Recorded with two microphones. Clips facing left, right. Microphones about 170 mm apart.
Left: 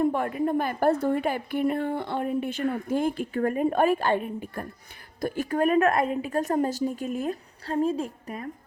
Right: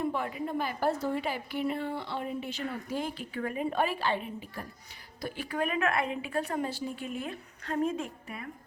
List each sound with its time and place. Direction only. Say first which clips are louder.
0.0 s a woman's voice: left 8 dB; 50° left (ahead or behind)